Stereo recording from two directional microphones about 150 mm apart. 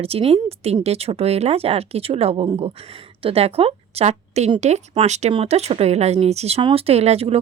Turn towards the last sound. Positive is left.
turn(degrees=-45)  # may be behind; listen again after turning